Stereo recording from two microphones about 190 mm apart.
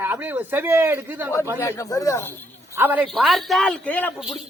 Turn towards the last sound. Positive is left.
turn(degrees=0)  # may be behind; listen again after turning